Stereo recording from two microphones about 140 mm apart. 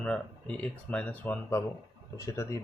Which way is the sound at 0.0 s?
10° left (ahead or behind).